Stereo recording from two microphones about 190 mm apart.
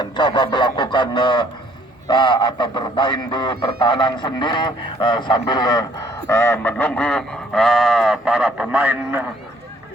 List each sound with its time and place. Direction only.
0.0 s speech: 25° left (ahead or behind)
6.2 s sheep: 15° left (ahead or behind); by 9.2 s 10° right (ahead or behind)